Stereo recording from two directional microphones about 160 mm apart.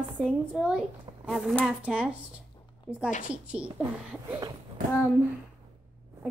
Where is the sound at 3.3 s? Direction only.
5° right (ahead or behind).